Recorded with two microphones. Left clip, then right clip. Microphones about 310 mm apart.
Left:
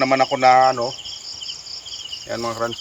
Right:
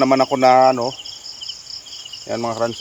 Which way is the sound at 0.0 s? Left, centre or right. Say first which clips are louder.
Right 1 dB; right.